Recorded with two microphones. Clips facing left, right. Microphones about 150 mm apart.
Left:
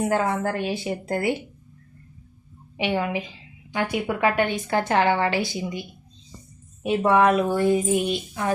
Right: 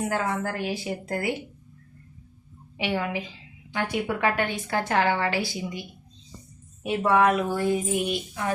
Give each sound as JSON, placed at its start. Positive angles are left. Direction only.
{"t": 0.0, "sound": "a woman's voice", "side_deg": 30}
{"t": 2.7, "sound": "a woman's voice", "side_deg": 20}
{"t": 6.8, "sound": "a woman's voice", "side_deg": 25}